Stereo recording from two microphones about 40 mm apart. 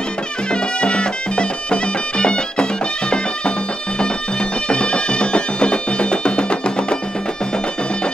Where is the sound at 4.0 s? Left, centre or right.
Left.